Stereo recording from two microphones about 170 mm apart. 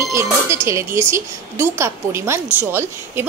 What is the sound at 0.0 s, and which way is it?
A woman's voice, 15° right (ahead or behind).